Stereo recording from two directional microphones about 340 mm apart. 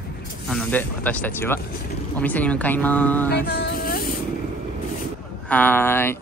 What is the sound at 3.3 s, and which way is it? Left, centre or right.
Music, left.